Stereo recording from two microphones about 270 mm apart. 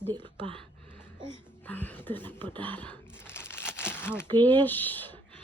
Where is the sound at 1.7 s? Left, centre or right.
Centre.